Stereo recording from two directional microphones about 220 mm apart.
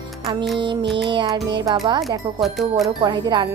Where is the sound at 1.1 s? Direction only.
20° right (ahead or behind).